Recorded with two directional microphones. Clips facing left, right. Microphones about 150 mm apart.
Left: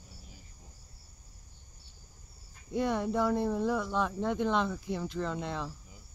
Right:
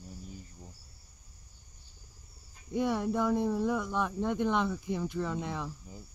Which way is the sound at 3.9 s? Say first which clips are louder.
Even; 10° right (ahead or behind).